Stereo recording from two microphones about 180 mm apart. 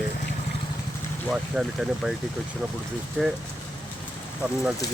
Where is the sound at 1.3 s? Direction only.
5° right (ahead or behind).